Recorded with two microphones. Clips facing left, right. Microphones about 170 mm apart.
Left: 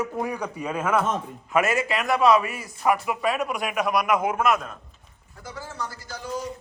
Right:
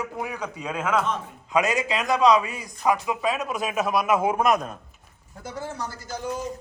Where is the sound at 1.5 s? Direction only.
20° right (ahead or behind).